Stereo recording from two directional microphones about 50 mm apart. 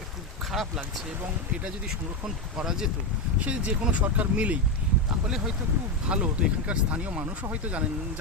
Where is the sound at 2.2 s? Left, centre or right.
Centre.